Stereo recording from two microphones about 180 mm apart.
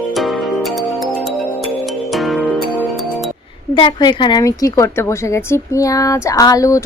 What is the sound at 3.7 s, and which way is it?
A woman's voice, 25° left (ahead or behind).